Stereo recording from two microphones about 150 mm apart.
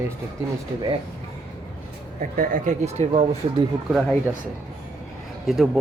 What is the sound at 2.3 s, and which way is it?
Speech, 65° right (ahead or behind).